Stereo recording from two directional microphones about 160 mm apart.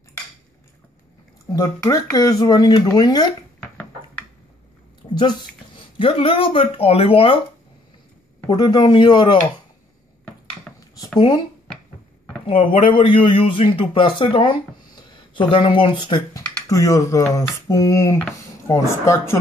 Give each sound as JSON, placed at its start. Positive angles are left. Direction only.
{"t": 1.5, "sound": "speech", "side_deg": 20}
{"t": 5.9, "sound": "a man's voice", "side_deg": 35}
{"t": 8.5, "sound": "speech", "side_deg": 25}
{"t": 10.7, "sound": "a sound", "side_deg": 5}
{"t": 11.1, "sound": "speech", "side_deg": 30}
{"t": 12.4, "sound": "a man's voice", "side_deg": 35}
{"t": 16.4, "sound": "typing", "side_deg": 10}
{"t": 16.7, "sound": "speech", "side_deg": 20}